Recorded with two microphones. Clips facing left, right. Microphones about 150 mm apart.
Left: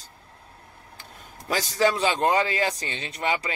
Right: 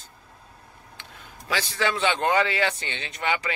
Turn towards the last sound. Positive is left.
turn(degrees=35)  # may be behind; listen again after turning